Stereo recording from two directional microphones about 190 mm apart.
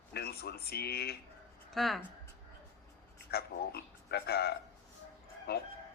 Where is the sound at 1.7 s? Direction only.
Centre (ahead or behind).